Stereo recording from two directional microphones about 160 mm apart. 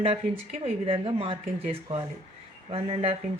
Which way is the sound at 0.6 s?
35° right (ahead or behind).